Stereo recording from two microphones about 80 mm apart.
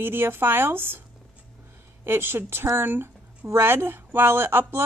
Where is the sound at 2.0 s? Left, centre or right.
Right.